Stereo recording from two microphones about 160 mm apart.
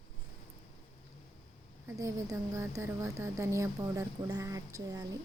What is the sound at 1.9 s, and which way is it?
Speech, 20° right (ahead or behind).